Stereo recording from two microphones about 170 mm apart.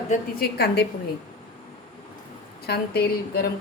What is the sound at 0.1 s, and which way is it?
Speech, 65° left (ahead or behind).